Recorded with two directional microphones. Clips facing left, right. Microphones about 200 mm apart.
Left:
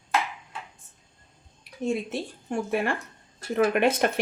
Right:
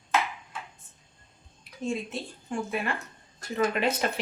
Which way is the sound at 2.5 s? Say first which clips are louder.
Left 4 dB; 45° left (ahead or behind).